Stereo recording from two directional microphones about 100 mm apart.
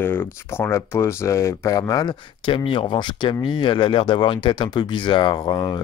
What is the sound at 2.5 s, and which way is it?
Speech, 55° left (ahead or behind).